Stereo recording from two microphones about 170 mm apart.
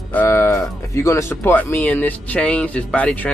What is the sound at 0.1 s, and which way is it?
Speech, 10° left (ahead or behind).